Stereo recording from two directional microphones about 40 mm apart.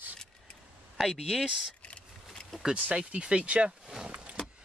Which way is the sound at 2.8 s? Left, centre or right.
Right.